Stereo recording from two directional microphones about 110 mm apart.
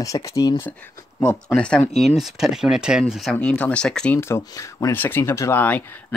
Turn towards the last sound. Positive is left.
turn(degrees=15)  # may be behind; listen again after turning